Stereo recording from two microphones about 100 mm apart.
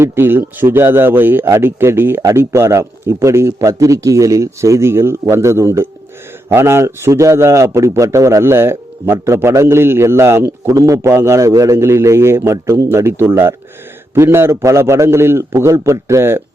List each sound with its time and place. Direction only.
0.0 s a man's voice: 20° right (ahead or behind)